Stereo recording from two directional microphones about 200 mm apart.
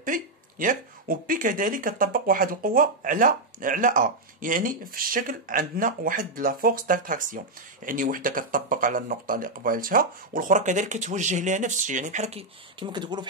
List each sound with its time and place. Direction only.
0.0 s speech: 40° right (ahead or behind); by 13.2 s 20° right (ahead or behind)